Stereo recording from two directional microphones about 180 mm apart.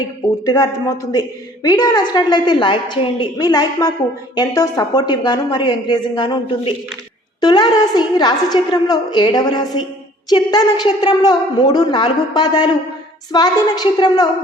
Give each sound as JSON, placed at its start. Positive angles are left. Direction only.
{"t": 0.0, "sound": "a woman's voice", "side_deg": 20}